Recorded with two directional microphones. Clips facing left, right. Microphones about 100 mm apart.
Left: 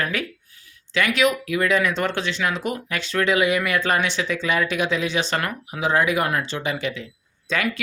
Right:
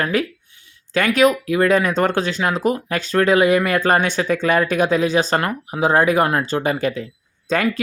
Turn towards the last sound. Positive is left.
turn(degrees=-40)  # may be behind; listen again after turning